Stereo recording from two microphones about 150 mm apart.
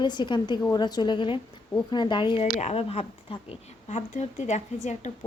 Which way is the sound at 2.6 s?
45° left (ahead or behind).